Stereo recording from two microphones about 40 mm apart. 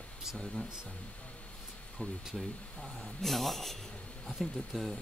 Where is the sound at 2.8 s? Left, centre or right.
Centre.